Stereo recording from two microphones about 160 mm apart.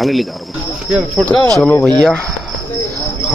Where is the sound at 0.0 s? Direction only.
Centre (ahead or behind).